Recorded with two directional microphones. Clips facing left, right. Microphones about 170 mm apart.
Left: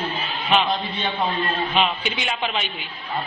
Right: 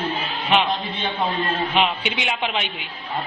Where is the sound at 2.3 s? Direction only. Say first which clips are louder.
Right 1 dB; 10° right (ahead or behind).